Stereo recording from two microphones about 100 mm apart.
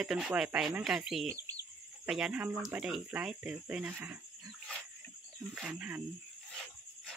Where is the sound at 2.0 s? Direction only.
5° right (ahead or behind).